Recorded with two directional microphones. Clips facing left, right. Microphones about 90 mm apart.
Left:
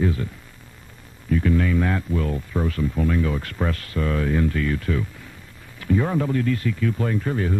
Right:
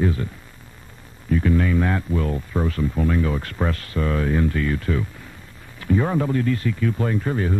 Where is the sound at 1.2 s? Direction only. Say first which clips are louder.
Right 1 dB; 30° right (ahead or behind).